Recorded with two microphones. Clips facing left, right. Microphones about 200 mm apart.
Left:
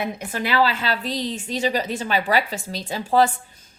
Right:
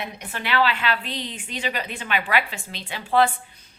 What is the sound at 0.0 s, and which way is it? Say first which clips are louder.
A woman's voice: left 6 dB; 40° left (ahead or behind).